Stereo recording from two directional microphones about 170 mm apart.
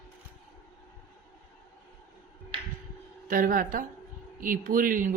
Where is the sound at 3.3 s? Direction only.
55° right (ahead or behind).